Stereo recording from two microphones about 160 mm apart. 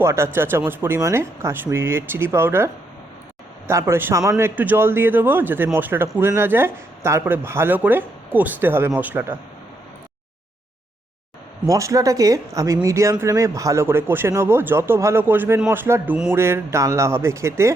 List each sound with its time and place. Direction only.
0.0 s speech: 15° right (ahead or behind)
3.7 s speech: 15° right (ahead or behind)
11.7 s speech: 20° right (ahead or behind)